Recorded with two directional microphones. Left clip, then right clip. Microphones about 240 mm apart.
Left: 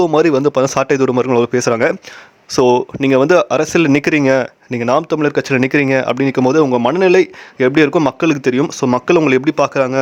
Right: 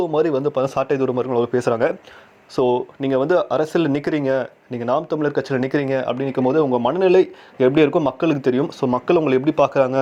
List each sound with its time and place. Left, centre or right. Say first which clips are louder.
0.0 s a man's voice: left 7 dB; left